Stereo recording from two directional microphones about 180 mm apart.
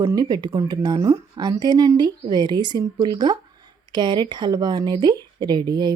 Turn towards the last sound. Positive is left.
turn(degrees=-25)  # may be behind; listen again after turning